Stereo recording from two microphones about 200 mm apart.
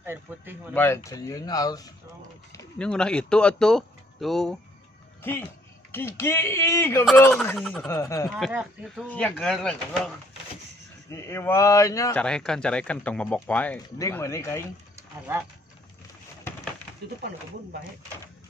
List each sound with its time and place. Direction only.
0.0 s speech: 10° right (ahead or behind)
0.7 s speech: 10° left (ahead or behind)
2.8 s a man's voice: 5° left (ahead or behind)
8.0 s speech: 15° left (ahead or behind)
8.4 s a man's voice: centre (ahead or behind); by 12.2 s 15° left (ahead or behind)
12.2 s a man's voice: 5° left (ahead or behind)